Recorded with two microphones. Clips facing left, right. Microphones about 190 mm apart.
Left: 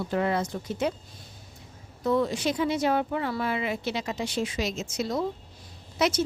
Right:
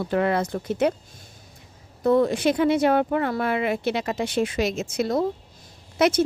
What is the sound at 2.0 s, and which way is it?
A woman's voice, 55° right (ahead or behind).